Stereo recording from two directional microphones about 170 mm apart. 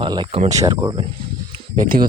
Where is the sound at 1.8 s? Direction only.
55° right (ahead or behind).